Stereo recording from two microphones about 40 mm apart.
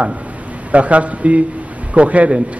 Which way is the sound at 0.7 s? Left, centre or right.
Right.